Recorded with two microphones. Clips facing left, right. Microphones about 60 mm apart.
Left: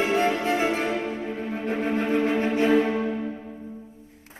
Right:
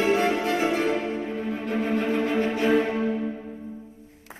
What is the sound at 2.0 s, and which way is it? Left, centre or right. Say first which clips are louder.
Music: left 3 dB; centre.